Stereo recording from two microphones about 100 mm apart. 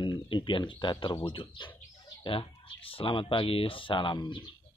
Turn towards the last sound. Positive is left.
turn(degrees=50)  # may be behind; listen again after turning